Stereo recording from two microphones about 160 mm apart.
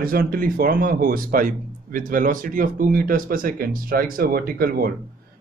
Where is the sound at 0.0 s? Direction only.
65° right (ahead or behind).